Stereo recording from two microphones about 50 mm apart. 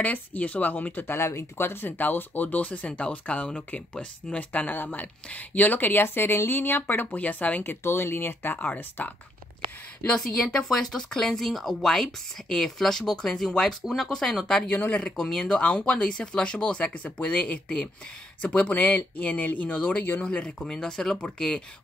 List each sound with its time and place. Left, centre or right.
0.0 s speech: left
1.1 s speech: left
4.5 s speech: left
7.6 s speech: left
8.5 s speech: left
10.1 s speech: centre
14.7 s speech: left
15.0 s speech: centre